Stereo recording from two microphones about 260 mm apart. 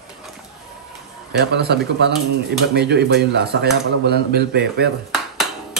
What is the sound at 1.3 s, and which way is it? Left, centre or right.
Speech, right.